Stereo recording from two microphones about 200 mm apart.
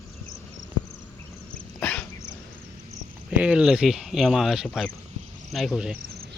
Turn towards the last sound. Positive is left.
turn(degrees=-5)  # may be behind; listen again after turning